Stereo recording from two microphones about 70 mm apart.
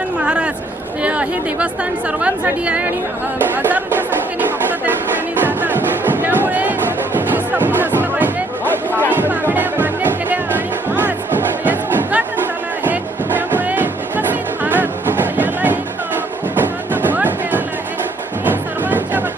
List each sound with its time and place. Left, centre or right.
0.2 s chatter: centre
1.0 s a woman's voice: centre
5.4 s music: right